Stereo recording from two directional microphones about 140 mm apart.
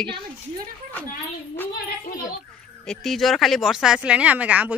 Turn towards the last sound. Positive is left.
turn(degrees=-10)  # may be behind; listen again after turning